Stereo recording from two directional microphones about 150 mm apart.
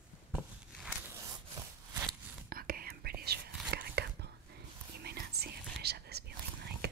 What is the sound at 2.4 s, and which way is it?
Whispering, 75° right (ahead or behind).